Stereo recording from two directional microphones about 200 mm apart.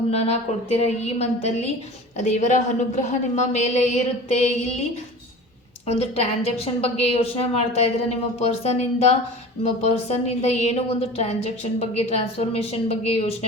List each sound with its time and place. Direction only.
0.1 s a woman's voice: 30° left (ahead or behind)